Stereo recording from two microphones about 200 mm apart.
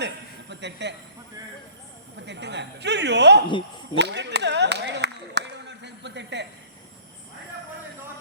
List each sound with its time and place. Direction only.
0.0 s a sound: 60° right (ahead or behind)
2.2 s speech: 60° right (ahead or behind)
3.9 s clapping: 60° right (ahead or behind)